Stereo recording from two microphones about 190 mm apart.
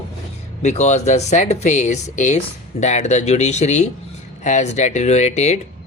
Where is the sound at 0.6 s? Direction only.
35° left (ahead or behind).